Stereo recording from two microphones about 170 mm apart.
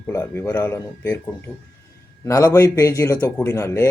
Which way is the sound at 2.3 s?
20° left (ahead or behind).